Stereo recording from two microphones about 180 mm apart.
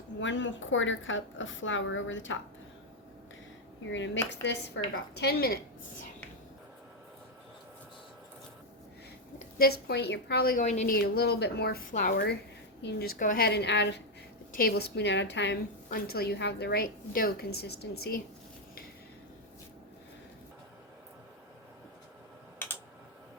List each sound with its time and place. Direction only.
0.2 s a woman's voice: 90° left
3.8 s a woman's voice: 90° left; by 5.5 s 60° left (ahead or behind)
9.6 s a woman's voice: 60° left (ahead or behind); by 14.0 s 75° left (ahead or behind)
14.5 s a woman's voice: 60° left (ahead or behind); by 15.5 s 75° left (ahead or behind)
15.9 s a woman's voice: 60° left (ahead or behind)